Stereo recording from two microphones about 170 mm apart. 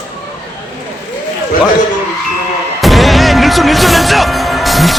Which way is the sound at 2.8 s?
Centre (ahead or behind).